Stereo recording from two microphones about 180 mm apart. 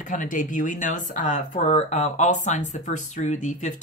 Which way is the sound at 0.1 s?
45° left (ahead or behind).